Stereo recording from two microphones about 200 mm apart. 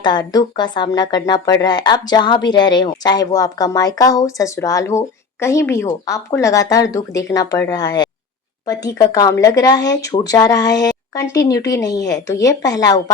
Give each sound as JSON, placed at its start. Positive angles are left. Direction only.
{"t": 0.0, "sound": "a woman's voice", "side_deg": 20}